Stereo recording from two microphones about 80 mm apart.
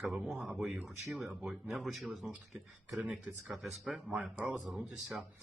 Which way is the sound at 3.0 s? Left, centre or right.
Centre.